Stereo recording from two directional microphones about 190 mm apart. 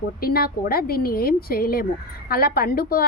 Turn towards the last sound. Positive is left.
turn(degrees=50)  # may be behind; listen again after turning